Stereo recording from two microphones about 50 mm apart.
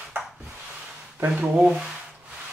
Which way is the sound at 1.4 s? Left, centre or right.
Right.